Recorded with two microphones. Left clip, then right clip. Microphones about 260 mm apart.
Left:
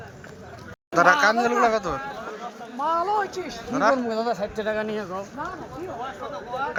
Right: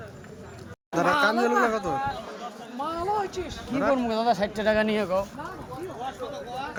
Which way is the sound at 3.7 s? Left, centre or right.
Centre.